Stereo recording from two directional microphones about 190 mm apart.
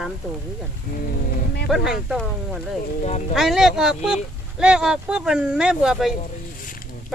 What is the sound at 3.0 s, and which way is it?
Speech, 35° left (ahead or behind).